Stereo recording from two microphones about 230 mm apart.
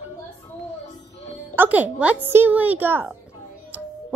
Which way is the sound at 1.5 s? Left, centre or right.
Centre.